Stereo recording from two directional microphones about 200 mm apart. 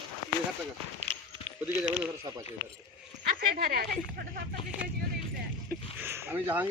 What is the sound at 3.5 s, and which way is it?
Speech, 50° right (ahead or behind).